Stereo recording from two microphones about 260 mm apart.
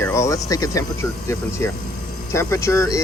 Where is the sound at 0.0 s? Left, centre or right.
Centre.